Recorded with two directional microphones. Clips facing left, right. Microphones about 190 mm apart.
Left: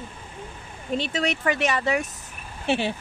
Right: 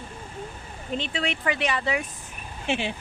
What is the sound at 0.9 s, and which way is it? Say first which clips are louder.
Speech: left 3 dB; 40° left (ahead or behind).